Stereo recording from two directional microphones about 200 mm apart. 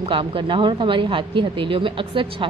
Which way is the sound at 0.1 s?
25° right (ahead or behind).